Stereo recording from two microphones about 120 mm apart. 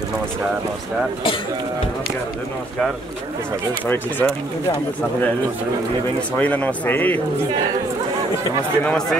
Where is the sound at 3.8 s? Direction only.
15° left (ahead or behind).